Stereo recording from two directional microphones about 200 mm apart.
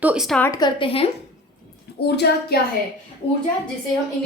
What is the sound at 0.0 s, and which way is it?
Speech, 5° right (ahead or behind).